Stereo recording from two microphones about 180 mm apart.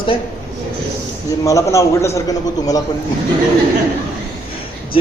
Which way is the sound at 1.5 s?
15° left (ahead or behind).